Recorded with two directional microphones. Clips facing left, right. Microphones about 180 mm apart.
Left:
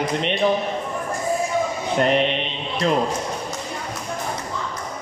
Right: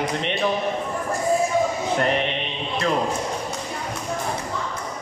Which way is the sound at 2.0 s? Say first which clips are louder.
Left 7 dB; 20° left (ahead or behind).